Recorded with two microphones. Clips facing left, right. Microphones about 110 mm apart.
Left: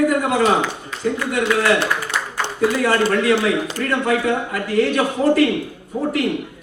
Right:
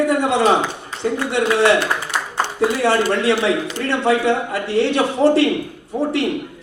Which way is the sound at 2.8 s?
30° right (ahead or behind).